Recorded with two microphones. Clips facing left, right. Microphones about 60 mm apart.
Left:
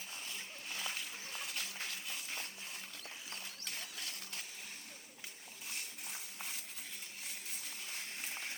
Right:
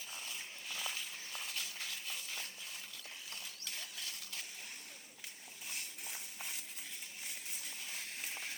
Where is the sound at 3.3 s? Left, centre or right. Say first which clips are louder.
Left 1 dB; left.